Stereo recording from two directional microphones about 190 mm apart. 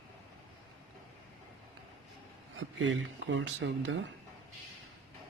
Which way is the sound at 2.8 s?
85° right.